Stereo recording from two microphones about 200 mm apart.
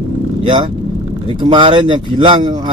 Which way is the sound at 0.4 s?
25° right (ahead or behind).